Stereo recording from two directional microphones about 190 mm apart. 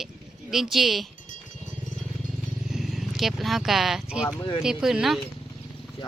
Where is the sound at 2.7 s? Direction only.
Centre (ahead or behind).